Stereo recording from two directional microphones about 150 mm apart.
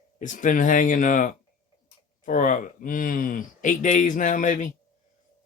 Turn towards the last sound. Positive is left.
turn(degrees=60)  # may be behind; listen again after turning